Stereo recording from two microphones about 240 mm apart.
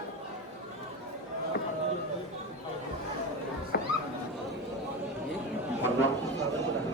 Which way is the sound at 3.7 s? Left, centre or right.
Left.